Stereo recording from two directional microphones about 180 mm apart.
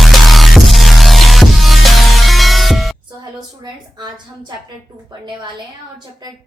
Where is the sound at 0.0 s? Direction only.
Centre (ahead or behind).